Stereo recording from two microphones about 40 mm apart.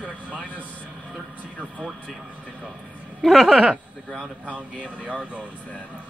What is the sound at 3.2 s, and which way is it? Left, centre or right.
Speech, centre.